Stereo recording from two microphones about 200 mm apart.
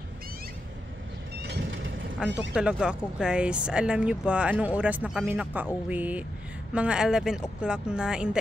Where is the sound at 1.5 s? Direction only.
65° right (ahead or behind).